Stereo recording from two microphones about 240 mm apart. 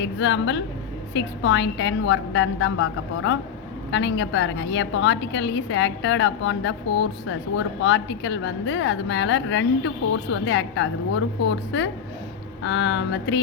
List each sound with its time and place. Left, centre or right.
0.0 s a woman's voice: left